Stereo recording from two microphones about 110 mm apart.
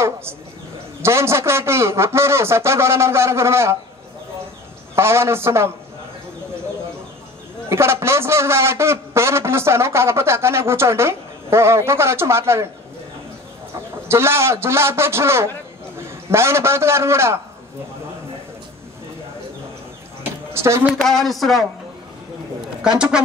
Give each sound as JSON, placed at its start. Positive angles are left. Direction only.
{"t": 0.0, "sound": "a man's voice", "side_deg": -20}
{"t": 4.9, "sound": "a man's voice", "side_deg": -25}
{"t": 7.7, "sound": "a man's voice", "side_deg": -25}
{"t": 14.0, "sound": "a man's voice", "side_deg": -25}
{"t": 20.5, "sound": "a sound", "side_deg": -25}
{"t": 21.0, "sound": "speech", "side_deg": 0}